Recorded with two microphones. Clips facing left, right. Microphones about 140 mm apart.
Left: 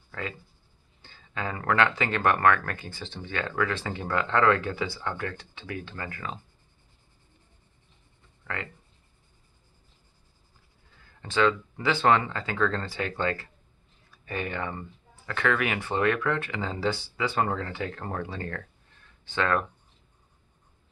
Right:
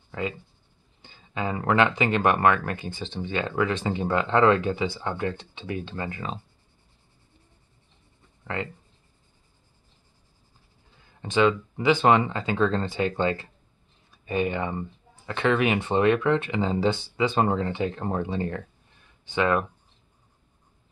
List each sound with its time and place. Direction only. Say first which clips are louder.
0.1 s speech: right 5 dB; 20° right (ahead or behind)
11.0 s speech: right 3 dB; 20° right (ahead or behind)
19.0 s a sound: right 3 dB; 15° right (ahead or behind)